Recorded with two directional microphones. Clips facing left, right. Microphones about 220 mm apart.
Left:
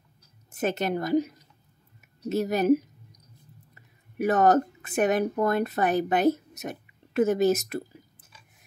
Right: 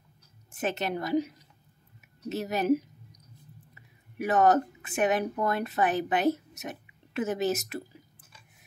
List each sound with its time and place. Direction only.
0.5 s a woman's voice: 40° left (ahead or behind)